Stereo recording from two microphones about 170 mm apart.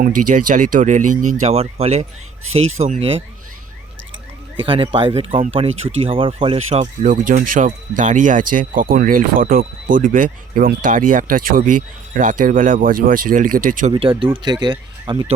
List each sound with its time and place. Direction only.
0.0 s speech: 50° right (ahead or behind); by 3.2 s 35° right (ahead or behind)
4.6 s speech: 30° right (ahead or behind); by 13.9 s 50° right (ahead or behind)
13.9 s speech: 30° right (ahead or behind)